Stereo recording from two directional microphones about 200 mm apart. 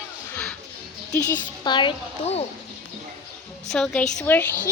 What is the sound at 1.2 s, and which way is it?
Speech, 10° left (ahead or behind).